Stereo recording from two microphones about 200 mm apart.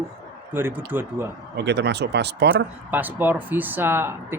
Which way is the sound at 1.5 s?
55° right (ahead or behind).